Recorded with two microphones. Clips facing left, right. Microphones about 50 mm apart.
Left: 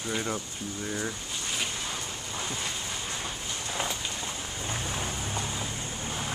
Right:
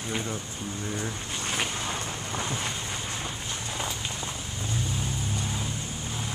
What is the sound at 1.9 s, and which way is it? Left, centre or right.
Wind noise, right.